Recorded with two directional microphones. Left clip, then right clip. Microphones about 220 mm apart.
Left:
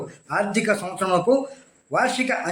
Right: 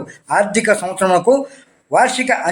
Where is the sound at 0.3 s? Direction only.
15° right (ahead or behind).